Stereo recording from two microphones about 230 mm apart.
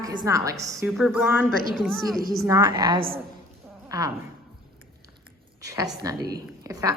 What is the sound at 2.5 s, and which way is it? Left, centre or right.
A woman's voice, centre.